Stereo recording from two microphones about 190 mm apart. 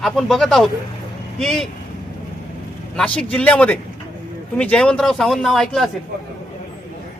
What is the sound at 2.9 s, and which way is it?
A man's voice, 5° left (ahead or behind).